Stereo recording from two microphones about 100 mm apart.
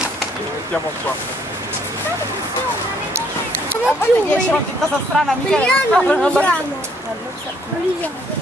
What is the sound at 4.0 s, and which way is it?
Speech, 15° left (ahead or behind).